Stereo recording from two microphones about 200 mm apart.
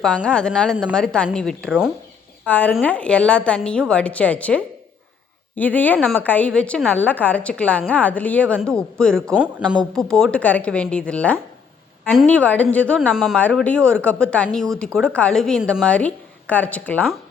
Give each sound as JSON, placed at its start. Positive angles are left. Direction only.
{"t": 0.0, "sound": "a woman's voice", "side_deg": 5}